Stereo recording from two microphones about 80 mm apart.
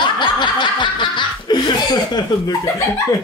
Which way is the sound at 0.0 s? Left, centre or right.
Left.